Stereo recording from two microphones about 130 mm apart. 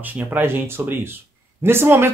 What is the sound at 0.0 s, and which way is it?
Speech, 15° right (ahead or behind).